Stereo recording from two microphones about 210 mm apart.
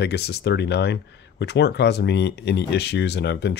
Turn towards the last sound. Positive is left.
turn(degrees=55)  # may be behind; listen again after turning